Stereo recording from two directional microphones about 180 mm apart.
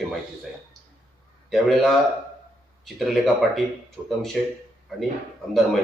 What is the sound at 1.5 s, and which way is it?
Speech, centre (ahead or behind).